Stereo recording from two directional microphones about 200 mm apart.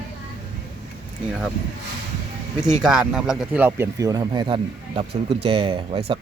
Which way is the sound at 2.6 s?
5° right (ahead or behind).